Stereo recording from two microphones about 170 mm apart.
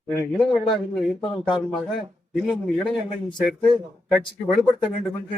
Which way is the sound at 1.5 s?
30° left (ahead or behind).